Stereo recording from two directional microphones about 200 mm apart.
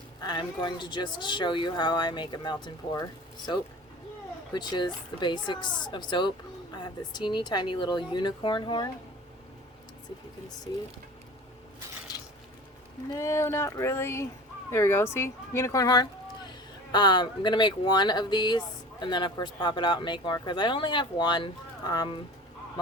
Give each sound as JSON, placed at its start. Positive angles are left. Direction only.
{"t": 0.2, "sound": "speech", "side_deg": 20}
{"t": 13.1, "sound": "speech", "side_deg": 15}